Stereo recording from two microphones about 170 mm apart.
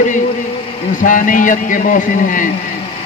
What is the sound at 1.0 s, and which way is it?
A man's voice, 50° left (ahead or behind).